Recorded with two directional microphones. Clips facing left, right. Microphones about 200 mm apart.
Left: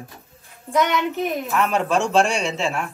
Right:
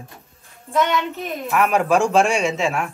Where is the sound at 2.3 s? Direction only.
35° left (ahead or behind).